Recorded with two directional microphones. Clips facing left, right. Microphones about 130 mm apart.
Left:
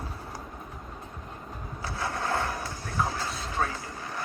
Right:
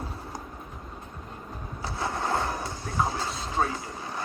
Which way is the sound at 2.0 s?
20° right (ahead or behind).